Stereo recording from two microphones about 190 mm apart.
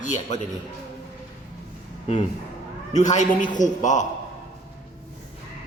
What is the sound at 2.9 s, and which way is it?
Speech, 40° left (ahead or behind).